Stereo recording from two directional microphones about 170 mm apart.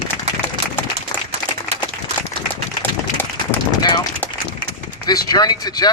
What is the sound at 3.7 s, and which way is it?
Run, 25° left (ahead or behind).